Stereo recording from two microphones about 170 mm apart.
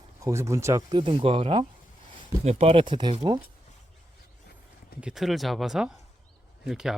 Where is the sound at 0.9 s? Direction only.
30° right (ahead or behind).